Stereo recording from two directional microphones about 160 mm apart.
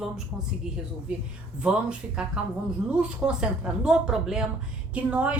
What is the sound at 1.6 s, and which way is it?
A woman's voice, 5° right (ahead or behind).